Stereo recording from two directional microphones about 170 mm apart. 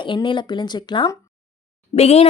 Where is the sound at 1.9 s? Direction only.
40° left (ahead or behind).